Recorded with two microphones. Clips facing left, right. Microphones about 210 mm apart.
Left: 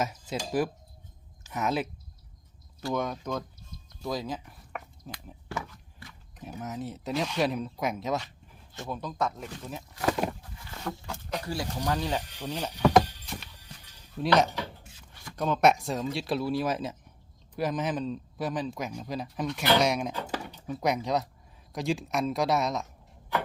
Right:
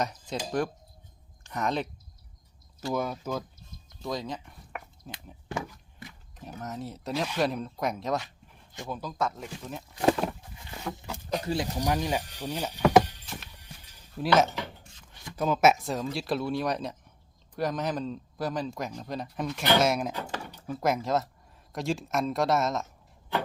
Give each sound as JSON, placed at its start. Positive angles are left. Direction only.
{"t": 0.0, "sound": "speech", "side_deg": 5}
{"t": 2.9, "sound": "speech", "side_deg": -5}
{"t": 4.0, "sound": "a sound", "side_deg": 0}
{"t": 5.5, "sound": "a sound", "side_deg": -20}
{"t": 6.4, "sound": "speech", "side_deg": 0}
{"t": 9.9, "sound": "speech", "side_deg": -25}
{"t": 10.9, "sound": "speech", "side_deg": -5}
{"t": 11.4, "sound": "speech", "side_deg": -20}